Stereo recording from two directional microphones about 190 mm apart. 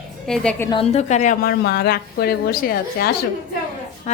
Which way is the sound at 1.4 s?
55° left (ahead or behind).